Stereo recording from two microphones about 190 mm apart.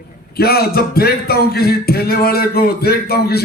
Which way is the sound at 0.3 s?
55° left (ahead or behind).